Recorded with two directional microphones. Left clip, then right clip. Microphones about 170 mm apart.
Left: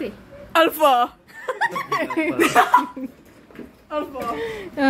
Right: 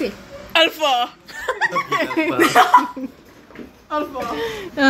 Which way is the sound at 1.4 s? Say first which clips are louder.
Right 4 dB; 30° right (ahead or behind).